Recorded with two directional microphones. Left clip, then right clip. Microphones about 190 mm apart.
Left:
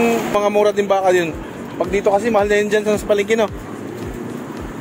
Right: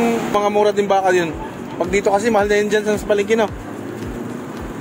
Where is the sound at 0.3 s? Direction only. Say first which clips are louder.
Right 2 dB; 15° left (ahead or behind).